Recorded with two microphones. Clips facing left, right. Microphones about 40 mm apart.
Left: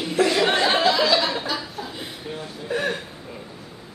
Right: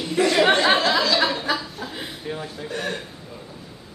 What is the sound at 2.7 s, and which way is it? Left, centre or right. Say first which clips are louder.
Speech: left 5 dB; centre.